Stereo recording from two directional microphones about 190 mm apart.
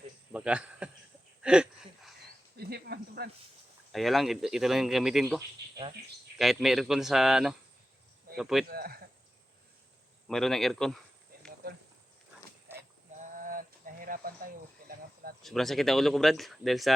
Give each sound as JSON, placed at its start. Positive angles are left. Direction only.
{"t": 0.3, "sound": "a man's voice", "side_deg": -5}
{"t": 1.4, "sound": "a sound", "side_deg": -5}
{"t": 2.6, "sound": "cricket", "side_deg": -55}
{"t": 3.9, "sound": "speech", "side_deg": 0}
{"t": 6.4, "sound": "speech", "side_deg": 0}
{"t": 8.6, "sound": "speech", "side_deg": -55}
{"t": 10.2, "sound": "speech", "side_deg": 0}
{"t": 12.7, "sound": "sheep", "side_deg": -10}
{"t": 13.1, "sound": "a sound", "side_deg": -45}
{"t": 14.8, "sound": "cricket", "side_deg": -50}
{"t": 15.4, "sound": "speech", "side_deg": 0}